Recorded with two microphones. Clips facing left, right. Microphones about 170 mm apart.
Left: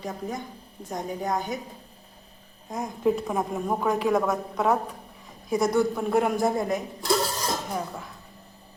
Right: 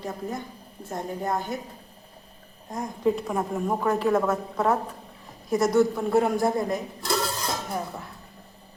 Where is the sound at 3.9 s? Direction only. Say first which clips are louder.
Right 1 dB; 15° left (ahead or behind).